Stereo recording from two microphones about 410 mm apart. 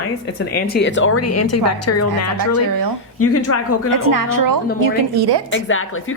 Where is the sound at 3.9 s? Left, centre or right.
Right.